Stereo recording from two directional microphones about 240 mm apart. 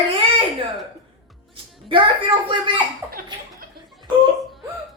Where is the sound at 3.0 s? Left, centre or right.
Right.